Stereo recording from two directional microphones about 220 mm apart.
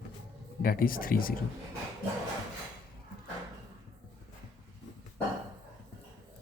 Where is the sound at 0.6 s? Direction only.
40° left (ahead or behind).